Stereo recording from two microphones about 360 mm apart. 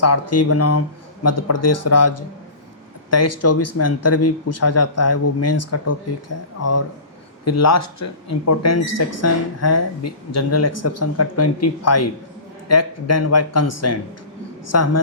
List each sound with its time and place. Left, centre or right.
0.0 s speech: left